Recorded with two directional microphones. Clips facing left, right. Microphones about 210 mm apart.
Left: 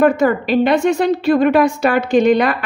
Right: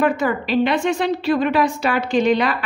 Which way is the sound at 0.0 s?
45° left (ahead or behind).